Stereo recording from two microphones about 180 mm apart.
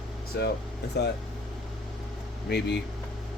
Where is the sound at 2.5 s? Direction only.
65° left (ahead or behind).